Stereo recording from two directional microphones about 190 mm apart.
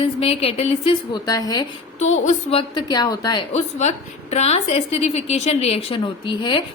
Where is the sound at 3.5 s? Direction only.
35° left (ahead or behind).